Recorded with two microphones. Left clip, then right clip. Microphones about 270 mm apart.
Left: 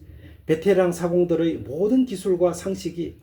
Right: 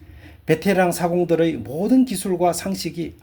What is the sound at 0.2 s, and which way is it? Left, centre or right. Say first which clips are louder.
A man's voice: right 2 dB; right.